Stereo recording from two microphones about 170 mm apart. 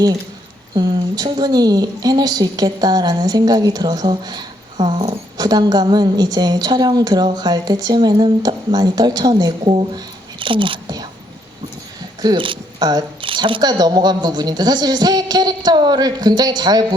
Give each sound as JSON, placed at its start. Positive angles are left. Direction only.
{"t": 0.7, "sound": "a woman's voice", "side_deg": -25}
{"t": 12.2, "sound": "a woman's voice", "side_deg": -30}